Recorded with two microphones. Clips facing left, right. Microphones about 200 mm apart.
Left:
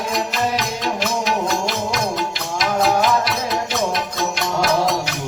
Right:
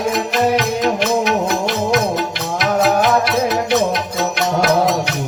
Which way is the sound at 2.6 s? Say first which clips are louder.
Right 3 dB; 60° right (ahead or behind).